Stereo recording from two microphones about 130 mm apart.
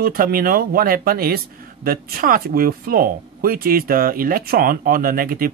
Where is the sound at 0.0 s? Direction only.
90° right.